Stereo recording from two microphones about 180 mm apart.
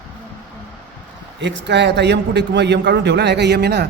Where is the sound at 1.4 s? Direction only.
75° right (ahead or behind).